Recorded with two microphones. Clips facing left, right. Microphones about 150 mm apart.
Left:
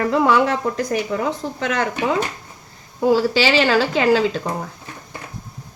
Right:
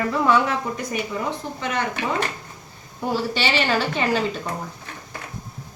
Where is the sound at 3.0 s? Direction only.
90° left.